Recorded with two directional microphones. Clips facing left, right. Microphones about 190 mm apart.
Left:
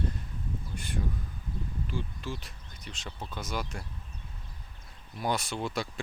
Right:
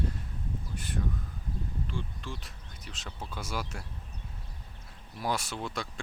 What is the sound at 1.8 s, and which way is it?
Speech, 5° left (ahead or behind).